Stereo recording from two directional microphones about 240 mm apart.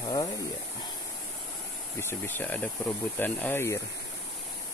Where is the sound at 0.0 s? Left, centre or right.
Centre.